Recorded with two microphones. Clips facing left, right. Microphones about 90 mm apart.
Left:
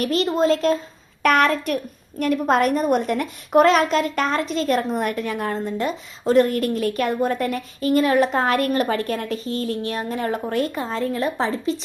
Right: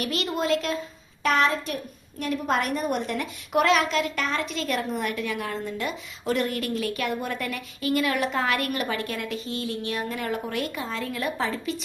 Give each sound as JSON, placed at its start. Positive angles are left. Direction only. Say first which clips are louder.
{"t": 0.0, "sound": "a woman's voice", "louder": "left 8 dB", "side_deg": 35}
{"t": 1.2, "sound": "a woman's voice", "louder": "left 5 dB", "side_deg": 60}